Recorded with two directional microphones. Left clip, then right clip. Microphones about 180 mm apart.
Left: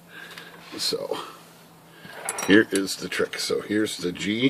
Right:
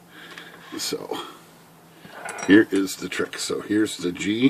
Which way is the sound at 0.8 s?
25° right (ahead or behind).